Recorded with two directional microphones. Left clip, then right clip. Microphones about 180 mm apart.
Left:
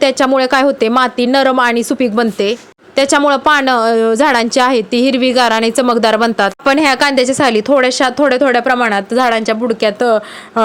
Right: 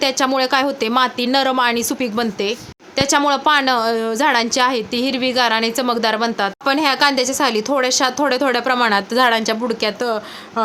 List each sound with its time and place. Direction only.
0.0 s a woman's voice: 30° left (ahead or behind)